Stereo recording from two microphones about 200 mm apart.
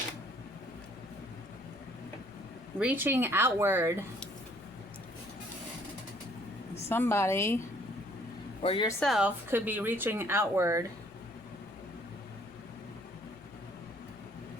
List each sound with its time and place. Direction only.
2.7 s speech: 10° right (ahead or behind)
6.8 s a woman's voice: 10° left (ahead or behind)
8.6 s speech: 25° left (ahead or behind)
8.9 s speech: centre (ahead or behind); by 10.8 s 15° right (ahead or behind)